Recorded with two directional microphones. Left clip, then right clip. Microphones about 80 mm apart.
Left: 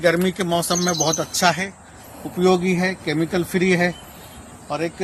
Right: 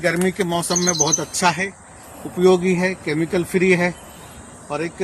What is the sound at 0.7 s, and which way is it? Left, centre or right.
Speech, left.